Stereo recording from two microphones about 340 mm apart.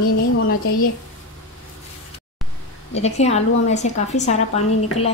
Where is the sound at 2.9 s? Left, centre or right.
Centre.